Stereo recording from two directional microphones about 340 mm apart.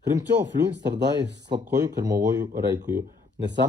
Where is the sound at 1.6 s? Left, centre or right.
Centre.